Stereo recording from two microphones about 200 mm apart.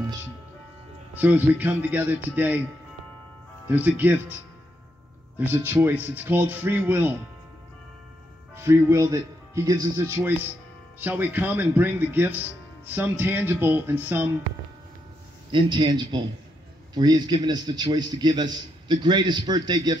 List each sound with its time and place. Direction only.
1.1 s speech: 10° right (ahead or behind)
3.6 s speech: 10° right (ahead or behind)
5.4 s speech: 10° right (ahead or behind)
8.5 s speech: 15° right (ahead or behind)
15.5 s a man's voice: 20° right (ahead or behind)